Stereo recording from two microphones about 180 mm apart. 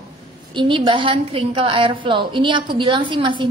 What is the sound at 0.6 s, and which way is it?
A woman's voice, 30° right (ahead or behind).